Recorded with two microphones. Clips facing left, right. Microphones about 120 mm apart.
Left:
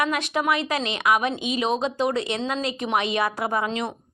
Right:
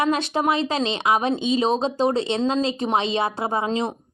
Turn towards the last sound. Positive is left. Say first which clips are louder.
# right 2 dB
turn(degrees=-30)  # may be behind; listen again after turning